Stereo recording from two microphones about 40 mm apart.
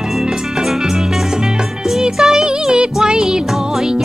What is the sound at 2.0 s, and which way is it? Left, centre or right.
Music, centre.